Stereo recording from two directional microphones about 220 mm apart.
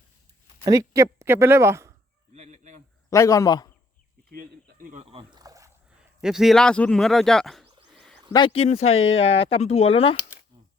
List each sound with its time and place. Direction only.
0.6 s speech: 15° right (ahead or behind)
2.3 s a sound: 30° right (ahead or behind)
3.1 s a man's voice: 15° left (ahead or behind)
4.3 s rowboat: 40° right (ahead or behind); by 5.7 s 15° right (ahead or behind)
6.2 s speech: centre (ahead or behind)
7.9 s a sound: centre (ahead or behind)
8.3 s speech: 20° left (ahead or behind)
8.9 s speech: 65° left (ahead or behind)
9.2 s speech: 25° left (ahead or behind)